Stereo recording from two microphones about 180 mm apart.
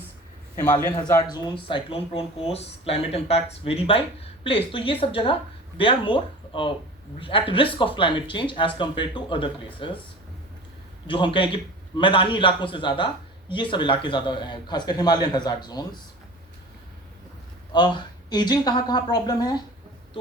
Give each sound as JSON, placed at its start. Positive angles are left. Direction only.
{"t": 0.5, "sound": "a man's voice", "side_deg": 15}
{"t": 1.3, "sound": "speech", "side_deg": 25}
{"t": 11.0, "sound": "speech", "side_deg": 25}
{"t": 17.7, "sound": "speech", "side_deg": 25}